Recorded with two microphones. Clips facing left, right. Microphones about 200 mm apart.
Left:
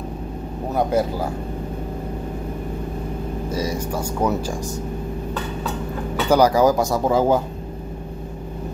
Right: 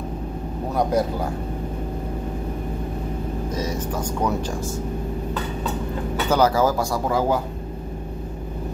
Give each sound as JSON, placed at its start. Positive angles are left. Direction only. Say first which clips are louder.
{"t": 3.4, "sound": "speech", "louder": "left 3 dB", "side_deg": 10}
{"t": 6.2, "sound": "speech", "louder": "left 4 dB", "side_deg": 15}